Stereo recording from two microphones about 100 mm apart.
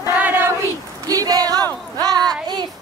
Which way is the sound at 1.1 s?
40° right (ahead or behind).